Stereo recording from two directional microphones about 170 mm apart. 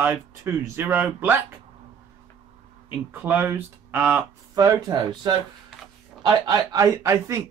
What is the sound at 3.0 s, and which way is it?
Speech, 10° right (ahead or behind).